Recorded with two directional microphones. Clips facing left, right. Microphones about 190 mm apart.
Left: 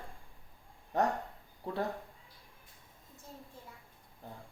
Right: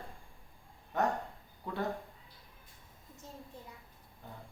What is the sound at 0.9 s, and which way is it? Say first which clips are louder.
Speech: left 1 dB; 35° left (ahead or behind).